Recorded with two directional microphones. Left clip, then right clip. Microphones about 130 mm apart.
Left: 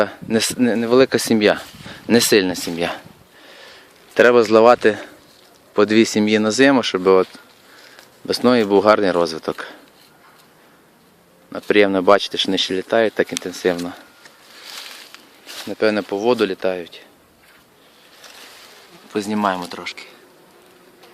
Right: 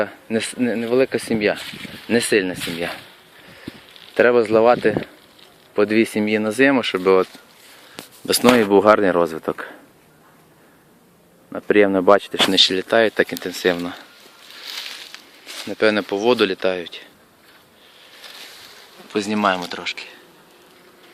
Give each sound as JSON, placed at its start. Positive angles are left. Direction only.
{"t": 0.0, "sound": "speech", "side_deg": 40}
{"t": 4.1, "sound": "speech", "side_deg": 30}
{"t": 8.3, "sound": "speech", "side_deg": 0}
{"t": 11.5, "sound": "speech", "side_deg": 15}
{"t": 14.6, "sound": "a sound", "side_deg": 10}
{"t": 15.6, "sound": "speech", "side_deg": 0}
{"t": 19.0, "sound": "speech", "side_deg": 0}